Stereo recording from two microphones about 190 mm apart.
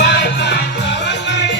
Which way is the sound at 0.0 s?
65° left (ahead or behind).